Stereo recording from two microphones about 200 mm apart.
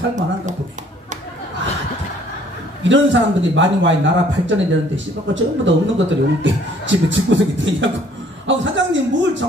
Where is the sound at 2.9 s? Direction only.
65° right (ahead or behind).